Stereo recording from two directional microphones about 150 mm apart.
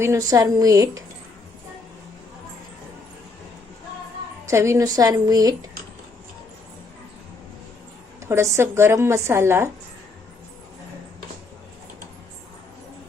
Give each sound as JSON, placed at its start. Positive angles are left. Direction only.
{"t": 0.0, "sound": "a woman's voice", "side_deg": -20}
{"t": 4.4, "sound": "a woman's voice", "side_deg": -20}
{"t": 8.2, "sound": "a woman's voice", "side_deg": -20}